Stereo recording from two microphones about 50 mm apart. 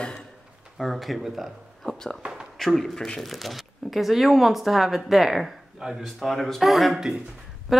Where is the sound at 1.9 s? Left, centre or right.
Centre.